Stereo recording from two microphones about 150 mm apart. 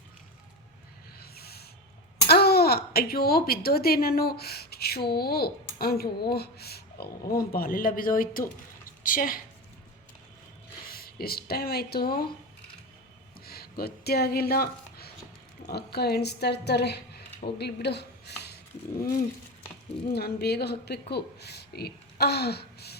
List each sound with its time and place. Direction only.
1.2 s a sound: 90° left
2.2 s speech: 90° left; by 9.4 s 65° left (ahead or behind)
10.8 s speech: 90° left
13.4 s a woman's voice: 90° left
20.1 s speech: 90° left